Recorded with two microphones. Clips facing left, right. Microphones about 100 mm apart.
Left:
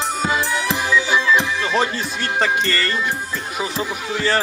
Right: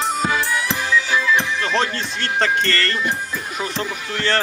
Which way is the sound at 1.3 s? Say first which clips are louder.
Left 1 dB; 10° left (ahead or behind).